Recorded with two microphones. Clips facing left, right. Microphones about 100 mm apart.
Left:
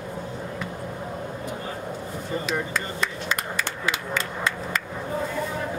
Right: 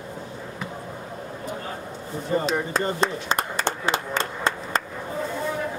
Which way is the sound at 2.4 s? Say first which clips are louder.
Right 2 dB; 35° right (ahead or behind).